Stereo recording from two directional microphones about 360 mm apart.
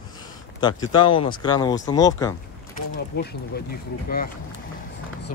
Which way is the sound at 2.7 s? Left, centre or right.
Left.